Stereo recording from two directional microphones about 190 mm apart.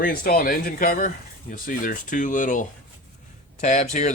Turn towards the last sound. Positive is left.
turn(degrees=40)  # may be behind; listen again after turning